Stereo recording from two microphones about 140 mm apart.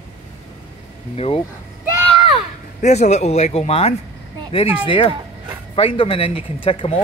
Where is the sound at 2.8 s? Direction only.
55° left (ahead or behind).